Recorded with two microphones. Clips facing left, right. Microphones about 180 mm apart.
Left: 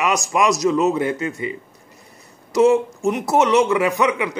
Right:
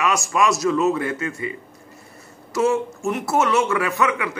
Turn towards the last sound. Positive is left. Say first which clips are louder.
# left 3 dB
turn(degrees=20)  # may be behind; listen again after turning